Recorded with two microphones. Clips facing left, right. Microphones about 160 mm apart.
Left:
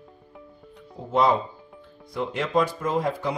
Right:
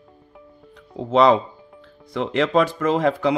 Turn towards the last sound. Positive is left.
turn(degrees=-90)